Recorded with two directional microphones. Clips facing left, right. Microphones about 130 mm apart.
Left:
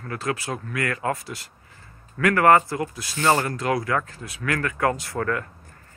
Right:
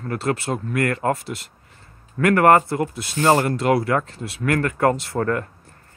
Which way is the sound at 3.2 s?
30° right (ahead or behind).